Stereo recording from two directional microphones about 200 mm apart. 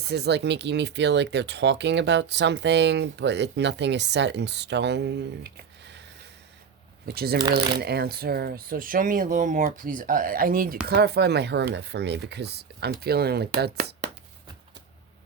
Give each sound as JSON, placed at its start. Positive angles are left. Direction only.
{"t": 0.0, "sound": "speech", "side_deg": -55}
{"t": 7.0, "sound": "speech", "side_deg": -50}